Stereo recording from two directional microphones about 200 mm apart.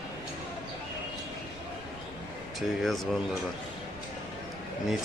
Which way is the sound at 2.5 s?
Centre (ahead or behind).